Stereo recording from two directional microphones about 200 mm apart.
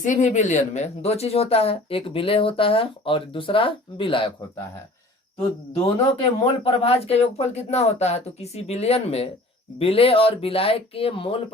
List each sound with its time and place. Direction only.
0.0 s speech: 40° left (ahead or behind)
5.4 s speech: 25° left (ahead or behind)